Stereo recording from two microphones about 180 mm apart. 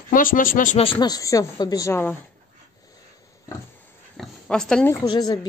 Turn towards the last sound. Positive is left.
turn(degrees=20)  # may be behind; listen again after turning